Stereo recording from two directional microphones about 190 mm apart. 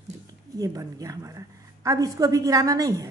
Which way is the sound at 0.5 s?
20° right (ahead or behind).